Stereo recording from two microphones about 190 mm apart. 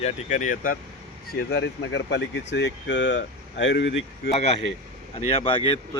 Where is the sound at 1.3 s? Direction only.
55° left (ahead or behind).